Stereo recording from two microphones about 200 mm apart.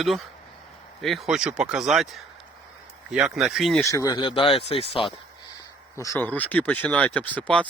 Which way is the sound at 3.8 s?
15° left (ahead or behind).